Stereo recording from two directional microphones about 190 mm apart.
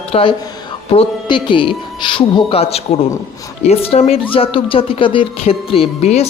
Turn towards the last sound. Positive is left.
turn(degrees=35)  # may be behind; listen again after turning